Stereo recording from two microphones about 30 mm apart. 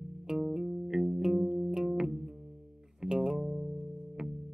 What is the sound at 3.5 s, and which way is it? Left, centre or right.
Music, centre.